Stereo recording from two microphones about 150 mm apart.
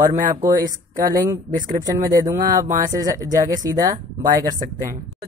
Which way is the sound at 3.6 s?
25° right (ahead or behind).